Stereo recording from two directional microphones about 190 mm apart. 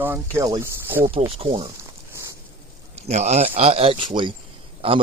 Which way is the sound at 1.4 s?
30° right (ahead or behind).